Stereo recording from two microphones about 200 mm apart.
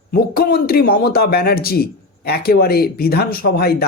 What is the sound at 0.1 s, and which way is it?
Speech, 50° left (ahead or behind).